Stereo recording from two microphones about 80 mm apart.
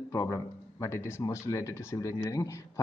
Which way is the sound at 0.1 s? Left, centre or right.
Left.